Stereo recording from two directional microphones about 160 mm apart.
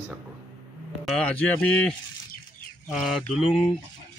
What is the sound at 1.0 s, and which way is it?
A man's voice, 5° left (ahead or behind).